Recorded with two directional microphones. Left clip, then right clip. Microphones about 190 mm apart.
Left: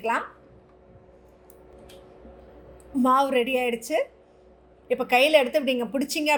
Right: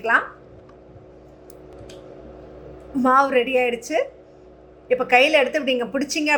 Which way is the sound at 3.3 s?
50° left (ahead or behind).